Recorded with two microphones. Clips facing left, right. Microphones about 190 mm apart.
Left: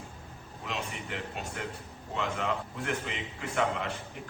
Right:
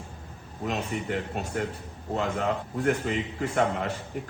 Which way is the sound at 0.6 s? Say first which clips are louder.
Right 7 dB; 45° right (ahead or behind).